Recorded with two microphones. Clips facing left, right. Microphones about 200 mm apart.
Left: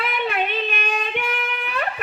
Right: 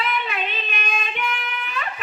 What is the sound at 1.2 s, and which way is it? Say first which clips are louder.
Music: left 2 dB; 60° left (ahead or behind).